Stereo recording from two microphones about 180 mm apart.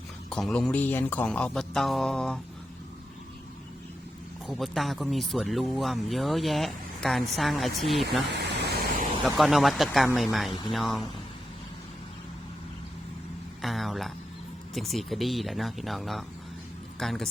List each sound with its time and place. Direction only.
0.3 s speech: 5° left (ahead or behind)
4.4 s speech: centre (ahead or behind)
8.3 s a sound: 65° right (ahead or behind)
9.2 s speech: centre (ahead or behind)
13.6 s a sound: centre (ahead or behind)
14.7 s speech: centre (ahead or behind)